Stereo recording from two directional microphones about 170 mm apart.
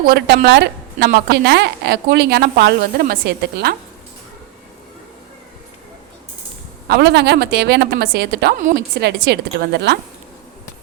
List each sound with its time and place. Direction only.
0.0 s a woman's voice: 65° right (ahead or behind)
6.8 s a woman's voice: 75° right (ahead or behind)
8.5 s a woman's voice: 50° right (ahead or behind)
9.0 s a woman's voice: 75° right (ahead or behind)